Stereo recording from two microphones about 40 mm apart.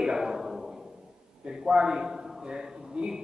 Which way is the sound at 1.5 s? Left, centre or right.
Centre.